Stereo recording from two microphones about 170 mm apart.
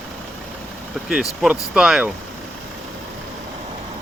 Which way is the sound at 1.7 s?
5° right (ahead or behind).